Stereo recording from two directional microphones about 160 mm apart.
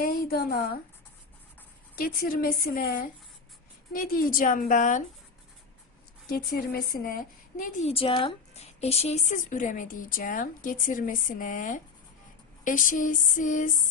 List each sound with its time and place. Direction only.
0.0 s a woman's voice: 70° left (ahead or behind)
2.0 s speech: 65° left (ahead or behind)
6.2 s a woman's voice: 65° left (ahead or behind)
7.9 s speech: 35° left (ahead or behind); by 13.7 s 55° left (ahead or behind)